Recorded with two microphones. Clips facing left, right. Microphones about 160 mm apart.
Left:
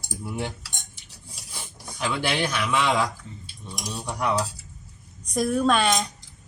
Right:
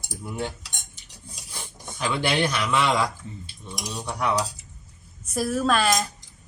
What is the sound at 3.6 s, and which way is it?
Cutlery, 15° right (ahead or behind).